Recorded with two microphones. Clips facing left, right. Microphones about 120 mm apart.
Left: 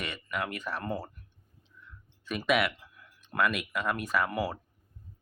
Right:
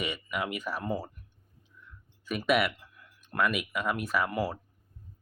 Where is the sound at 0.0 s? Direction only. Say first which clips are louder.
Right 2 dB; 10° right (ahead or behind).